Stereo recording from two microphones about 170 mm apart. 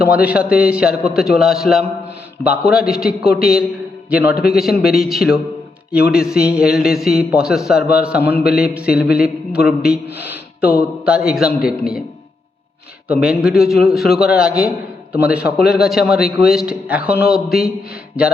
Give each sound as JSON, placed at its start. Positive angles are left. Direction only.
{"t": 0.0, "sound": "a man's voice", "side_deg": -5}
{"t": 11.6, "sound": "a man's voice", "side_deg": 60}
{"t": 13.1, "sound": "a man's voice", "side_deg": -5}